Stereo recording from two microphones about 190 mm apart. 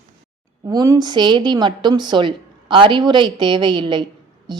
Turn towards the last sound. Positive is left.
turn(degrees=-20)  # may be behind; listen again after turning